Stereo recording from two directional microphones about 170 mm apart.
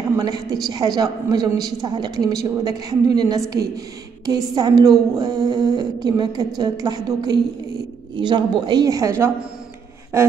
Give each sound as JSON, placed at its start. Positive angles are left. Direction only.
{"t": 0.1, "sound": "a woman's voice", "side_deg": -25}